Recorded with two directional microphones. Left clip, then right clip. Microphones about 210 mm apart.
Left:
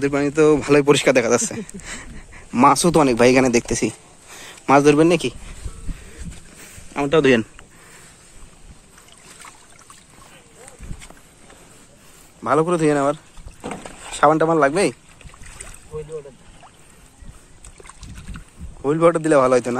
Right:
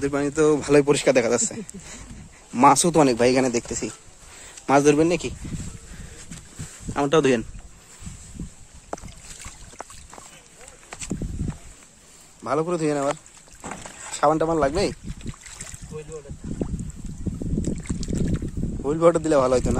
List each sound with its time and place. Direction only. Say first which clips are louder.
0.0 s speech: left 4 dB; 15° right (ahead or behind)
0.8 s a man's voice: left 4 dB; centre (ahead or behind)
4.4 s speech: left 4 dB; 10° right (ahead or behind)
6.9 s speech: left 2 dB; 25° right (ahead or behind)
12.4 s a man's voice: left 6 dB; 5° right (ahead or behind)
14.2 s speech: left 5 dB; 10° right (ahead or behind)
18.9 s speech: left 3 dB; 10° right (ahead or behind)